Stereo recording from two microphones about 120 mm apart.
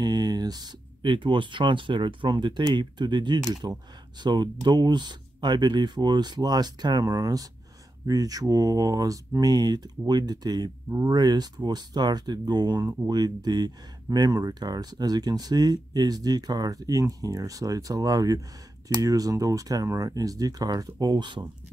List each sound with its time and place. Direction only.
0.0 s speech: 35° right (ahead or behind)